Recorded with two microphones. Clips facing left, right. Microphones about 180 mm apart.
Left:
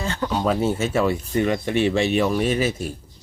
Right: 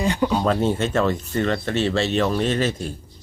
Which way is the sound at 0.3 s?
5° left (ahead or behind).